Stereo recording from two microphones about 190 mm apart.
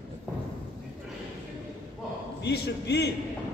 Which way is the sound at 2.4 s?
60° left (ahead or behind).